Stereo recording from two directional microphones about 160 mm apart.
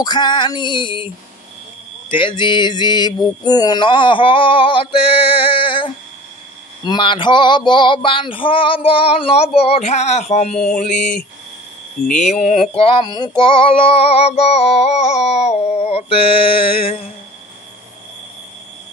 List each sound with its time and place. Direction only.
0.0 s a sound: 25° left (ahead or behind)
3.4 s female singing: 25° left (ahead or behind); by 11.0 s 50° left (ahead or behind)
11.0 s speech: 5° left (ahead or behind)
12.2 s speech: 50° left (ahead or behind)
12.7 s female singing: 35° left (ahead or behind)